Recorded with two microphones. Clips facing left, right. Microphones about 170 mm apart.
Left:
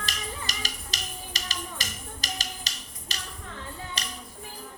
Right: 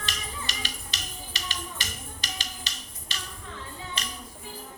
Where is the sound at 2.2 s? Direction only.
40° left (ahead or behind).